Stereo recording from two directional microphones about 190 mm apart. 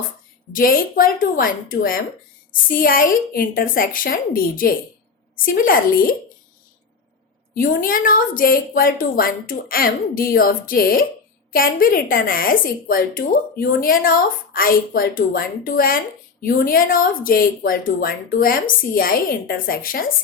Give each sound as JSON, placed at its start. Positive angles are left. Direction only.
{"t": 0.5, "sound": "a woman's voice", "side_deg": 45}
{"t": 7.5, "sound": "a woman's voice", "side_deg": 50}